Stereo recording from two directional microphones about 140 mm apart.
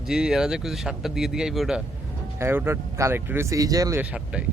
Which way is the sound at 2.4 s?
15° right (ahead or behind).